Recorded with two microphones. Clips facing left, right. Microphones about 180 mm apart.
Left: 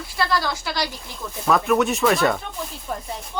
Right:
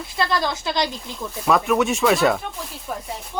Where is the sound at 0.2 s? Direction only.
20° right (ahead or behind).